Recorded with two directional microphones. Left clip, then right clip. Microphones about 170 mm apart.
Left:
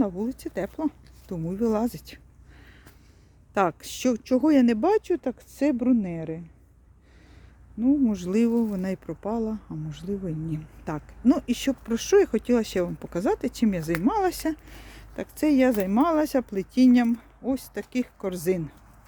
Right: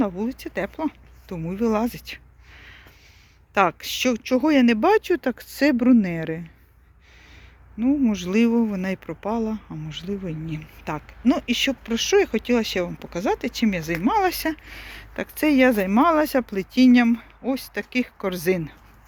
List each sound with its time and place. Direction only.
0.0 s speech: 30° left (ahead or behind)
4.8 s speech: 15° left (ahead or behind)
7.8 s speech: 35° left (ahead or behind); by 18.7 s 15° left (ahead or behind)